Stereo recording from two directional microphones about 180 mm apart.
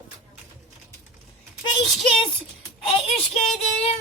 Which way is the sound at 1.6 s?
30° left (ahead or behind).